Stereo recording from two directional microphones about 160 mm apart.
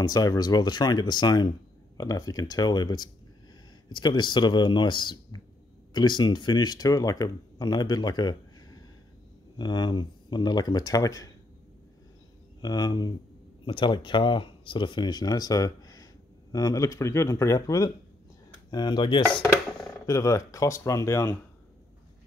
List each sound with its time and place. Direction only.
0.0 s speech: 25° left (ahead or behind)
9.6 s speech: 30° left (ahead or behind)
12.6 s speech: 25° left (ahead or behind)
19.2 s dishes: 5° left (ahead or behind)
20.1 s speech: 20° left (ahead or behind)